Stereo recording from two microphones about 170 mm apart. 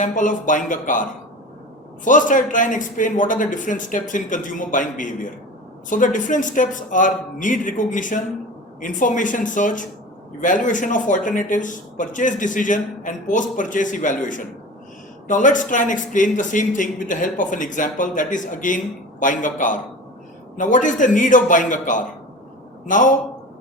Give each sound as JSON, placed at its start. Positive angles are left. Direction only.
{"t": 0.0, "sound": "speech", "side_deg": 50}
{"t": 2.0, "sound": "speech", "side_deg": 50}